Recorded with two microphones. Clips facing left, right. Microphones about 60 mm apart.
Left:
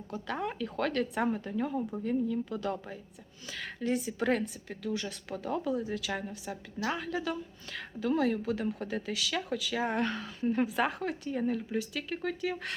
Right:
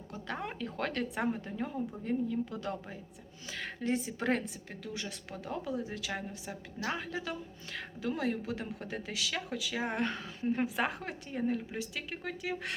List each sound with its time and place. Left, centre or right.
0.3 s a woman's voice: right
1.5 s speech: centre
2.0 s a woman's voice: right